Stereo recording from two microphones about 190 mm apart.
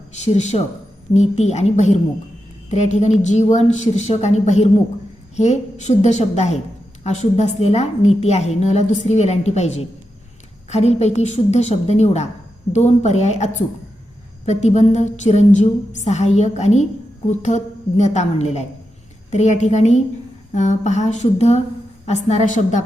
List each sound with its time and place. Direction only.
0.2 s a woman's voice: 35° left (ahead or behind)